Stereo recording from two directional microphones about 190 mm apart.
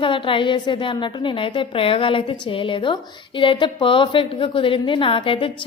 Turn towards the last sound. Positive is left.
turn(degrees=25)  # may be behind; listen again after turning